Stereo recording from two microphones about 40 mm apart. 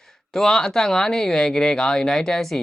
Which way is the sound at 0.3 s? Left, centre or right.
Centre.